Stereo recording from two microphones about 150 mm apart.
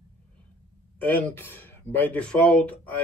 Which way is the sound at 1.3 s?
15° left (ahead or behind).